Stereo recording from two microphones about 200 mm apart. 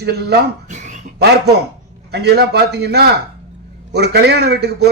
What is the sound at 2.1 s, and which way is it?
A man's voice, 55° right (ahead or behind).